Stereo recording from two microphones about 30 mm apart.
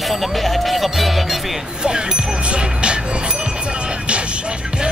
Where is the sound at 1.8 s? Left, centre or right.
Right.